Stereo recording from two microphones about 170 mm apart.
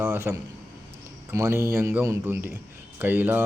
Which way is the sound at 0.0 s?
15° right (ahead or behind).